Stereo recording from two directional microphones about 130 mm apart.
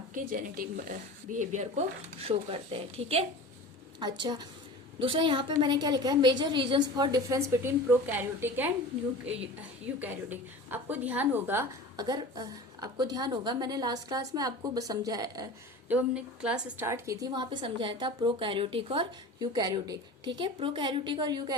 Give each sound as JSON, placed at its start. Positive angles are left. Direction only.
{"t": 0.1, "sound": "a woman's voice", "side_deg": -90}
{"t": 4.0, "sound": "a woman's voice", "side_deg": -35}
{"t": 9.8, "sound": "a woman's voice", "side_deg": -15}
{"t": 11.9, "sound": "a woman's voice", "side_deg": -30}
{"t": 15.9, "sound": "a woman's voice", "side_deg": -10}
{"t": 16.8, "sound": "a woman's voice", "side_deg": -25}